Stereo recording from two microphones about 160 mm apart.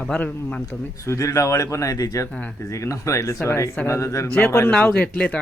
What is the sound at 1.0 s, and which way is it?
Speech, 20° left (ahead or behind).